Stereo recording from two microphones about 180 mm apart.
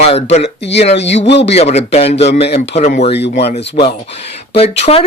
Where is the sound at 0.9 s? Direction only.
80° left.